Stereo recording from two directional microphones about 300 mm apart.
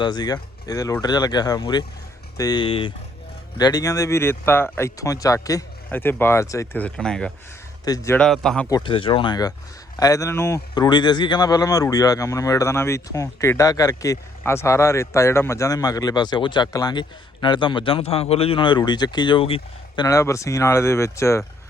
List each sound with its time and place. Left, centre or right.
0.0 s a man's voice: centre
8.7 s speech: centre